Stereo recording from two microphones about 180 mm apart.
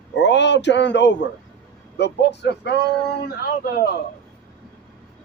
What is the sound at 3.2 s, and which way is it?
Speech, 55° left (ahead or behind).